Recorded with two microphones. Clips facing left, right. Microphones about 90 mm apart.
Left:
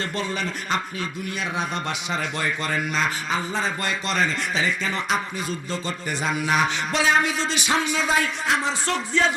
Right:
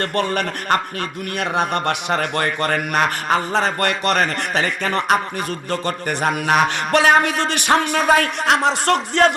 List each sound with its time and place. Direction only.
0.0 s a man's voice: 60° right (ahead or behind)